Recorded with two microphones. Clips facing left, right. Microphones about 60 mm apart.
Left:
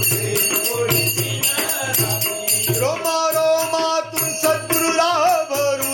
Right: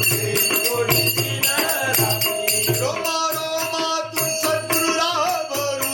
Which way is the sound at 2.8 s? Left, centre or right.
Left.